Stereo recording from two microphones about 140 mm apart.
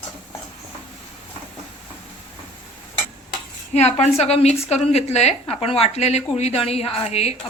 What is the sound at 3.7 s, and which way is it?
A woman's voice, 50° left (ahead or behind).